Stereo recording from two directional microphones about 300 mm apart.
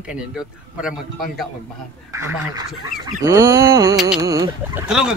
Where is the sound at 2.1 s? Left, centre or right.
Centre.